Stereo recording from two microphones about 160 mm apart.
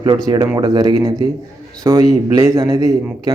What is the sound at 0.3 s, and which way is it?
Speech, 25° right (ahead or behind).